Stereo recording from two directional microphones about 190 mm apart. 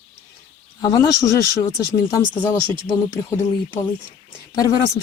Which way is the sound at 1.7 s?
20° left (ahead or behind).